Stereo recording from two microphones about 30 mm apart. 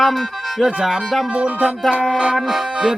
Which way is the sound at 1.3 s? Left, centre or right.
Right.